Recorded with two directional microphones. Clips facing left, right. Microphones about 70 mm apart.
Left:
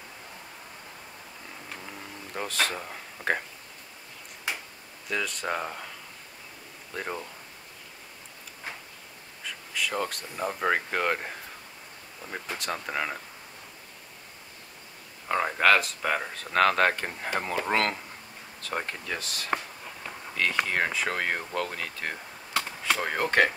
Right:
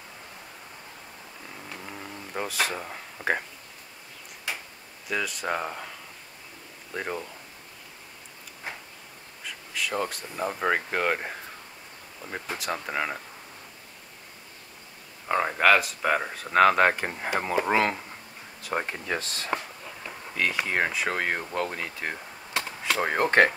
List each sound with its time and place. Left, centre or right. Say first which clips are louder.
1.8 s a sound: right 2 dB; centre
5.0 s speech: right 1 dB; centre
6.9 s speech: right 2 dB; centre
9.8 s speech: right 1 dB; centre
12.5 s speech: right 1 dB; centre
15.2 s speech: right 1 dB; centre
19.0 s speech: right 3 dB; right
20.3 s speech: right 1 dB; centre; by 23.4 s right